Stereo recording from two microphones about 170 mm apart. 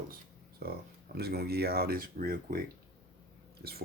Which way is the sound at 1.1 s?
70° right (ahead or behind).